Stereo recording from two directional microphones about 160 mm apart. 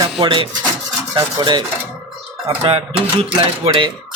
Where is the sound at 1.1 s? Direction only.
25° right (ahead or behind).